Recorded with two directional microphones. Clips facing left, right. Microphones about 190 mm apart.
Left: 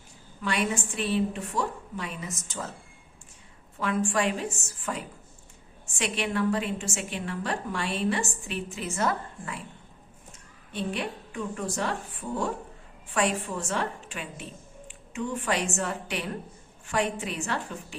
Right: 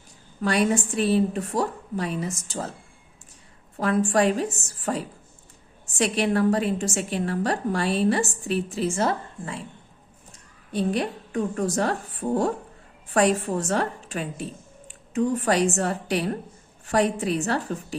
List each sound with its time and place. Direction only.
0.4 s a woman's voice: 40° right (ahead or behind)
3.8 s a woman's voice: 40° right (ahead or behind)
10.7 s a woman's voice: 40° right (ahead or behind)